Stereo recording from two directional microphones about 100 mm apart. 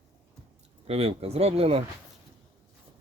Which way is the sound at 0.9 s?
85° right.